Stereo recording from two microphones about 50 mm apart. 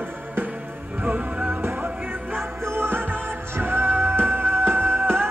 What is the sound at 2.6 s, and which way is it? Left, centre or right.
Music, right.